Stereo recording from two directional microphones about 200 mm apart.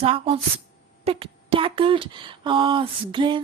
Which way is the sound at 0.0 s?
25° right (ahead or behind).